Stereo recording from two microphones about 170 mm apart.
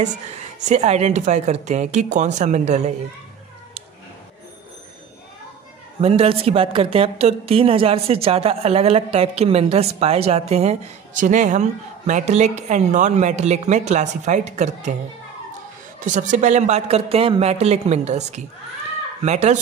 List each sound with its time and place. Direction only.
0.0 s a woman's voice: 45° right (ahead or behind)
5.9 s a woman's voice: 35° right (ahead or behind)
16.0 s a woman's voice: 45° right (ahead or behind)